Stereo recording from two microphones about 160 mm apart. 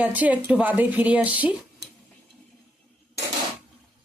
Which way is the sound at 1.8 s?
90° right.